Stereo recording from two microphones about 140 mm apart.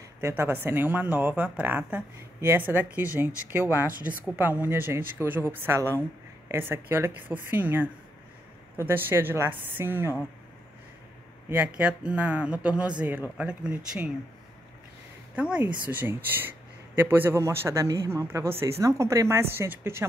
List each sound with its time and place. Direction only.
0.2 s speech: 15° right (ahead or behind)
11.4 s speech: 10° right (ahead or behind)
15.3 s speech: 10° right (ahead or behind)